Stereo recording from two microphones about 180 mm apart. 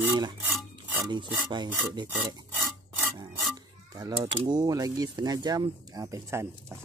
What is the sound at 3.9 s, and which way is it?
Speech, 25° right (ahead or behind).